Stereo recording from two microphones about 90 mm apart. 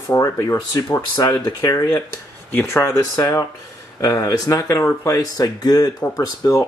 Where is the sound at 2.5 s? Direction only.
25° left (ahead or behind).